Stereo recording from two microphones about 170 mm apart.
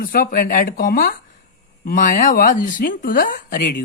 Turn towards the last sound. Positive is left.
turn(degrees=60)  # may be behind; listen again after turning